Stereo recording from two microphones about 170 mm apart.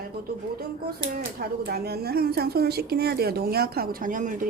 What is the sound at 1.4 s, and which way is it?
Speech, 65° right (ahead or behind).